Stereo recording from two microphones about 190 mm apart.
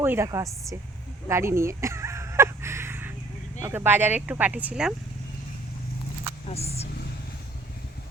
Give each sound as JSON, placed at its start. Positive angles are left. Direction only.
{"t": 0.0, "sound": "speech", "side_deg": -10}
{"t": 1.3, "sound": "a sound", "side_deg": -15}
{"t": 3.6, "sound": "speech", "side_deg": -10}
{"t": 6.5, "sound": "speech", "side_deg": 35}